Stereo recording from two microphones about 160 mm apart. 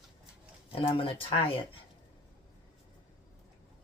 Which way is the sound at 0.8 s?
35° left (ahead or behind).